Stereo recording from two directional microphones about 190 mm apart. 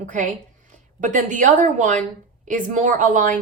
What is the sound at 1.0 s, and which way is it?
A woman's voice, 40° right (ahead or behind).